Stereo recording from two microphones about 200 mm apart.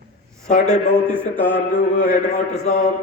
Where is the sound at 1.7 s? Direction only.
40° left (ahead or behind).